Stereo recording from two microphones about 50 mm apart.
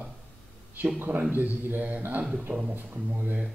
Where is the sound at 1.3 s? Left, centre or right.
Right.